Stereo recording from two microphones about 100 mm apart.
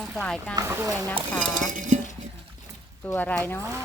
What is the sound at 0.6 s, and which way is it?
Speech, 25° right (ahead or behind).